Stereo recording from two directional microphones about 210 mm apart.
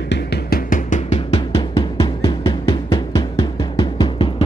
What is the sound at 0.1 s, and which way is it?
Drum, 50° left (ahead or behind).